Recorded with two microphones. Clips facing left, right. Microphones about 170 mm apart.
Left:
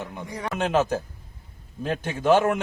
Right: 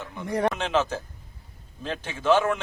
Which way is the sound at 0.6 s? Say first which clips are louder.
Left 3 dB; 45° left (ahead or behind).